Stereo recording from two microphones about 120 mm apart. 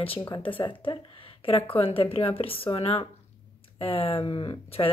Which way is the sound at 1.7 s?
50° left (ahead or behind).